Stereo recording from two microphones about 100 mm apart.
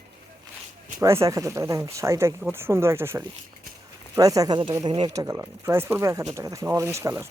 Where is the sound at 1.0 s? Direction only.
30° right (ahead or behind).